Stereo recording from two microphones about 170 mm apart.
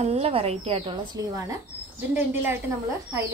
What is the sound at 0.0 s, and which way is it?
Speech, 40° right (ahead or behind).